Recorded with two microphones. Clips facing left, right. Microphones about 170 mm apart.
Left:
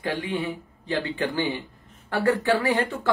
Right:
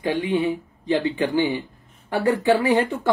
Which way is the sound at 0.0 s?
15° right (ahead or behind).